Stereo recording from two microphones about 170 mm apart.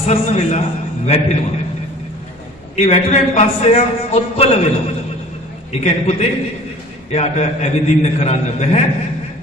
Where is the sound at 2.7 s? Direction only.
40° left (ahead or behind).